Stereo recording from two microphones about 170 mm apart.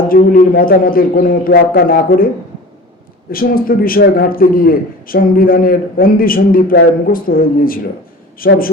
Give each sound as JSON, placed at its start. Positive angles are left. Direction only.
{"t": 0.1, "sound": "a man's voice", "side_deg": 55}
{"t": 3.3, "sound": "a man's voice", "side_deg": 60}